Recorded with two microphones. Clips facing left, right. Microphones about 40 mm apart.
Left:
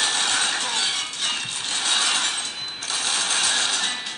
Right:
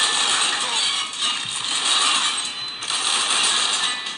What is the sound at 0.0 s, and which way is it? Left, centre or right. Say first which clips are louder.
Music: right 2 dB; right.